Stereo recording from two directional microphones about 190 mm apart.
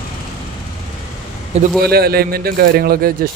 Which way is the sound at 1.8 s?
55° right (ahead or behind).